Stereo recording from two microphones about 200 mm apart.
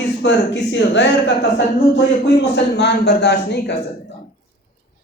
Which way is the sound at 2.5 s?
55° left (ahead or behind).